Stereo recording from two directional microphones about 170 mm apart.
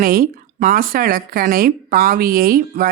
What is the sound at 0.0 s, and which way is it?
Speech, 55° right (ahead or behind).